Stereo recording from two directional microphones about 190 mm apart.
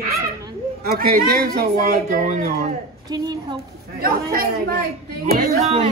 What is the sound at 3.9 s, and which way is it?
Speech, 50° right (ahead or behind).